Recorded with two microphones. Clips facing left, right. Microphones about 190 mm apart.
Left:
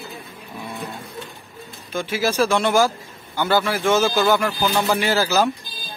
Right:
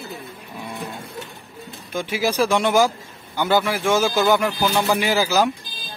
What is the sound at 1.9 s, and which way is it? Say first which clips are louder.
A man's voice: even; 15° right (ahead or behind).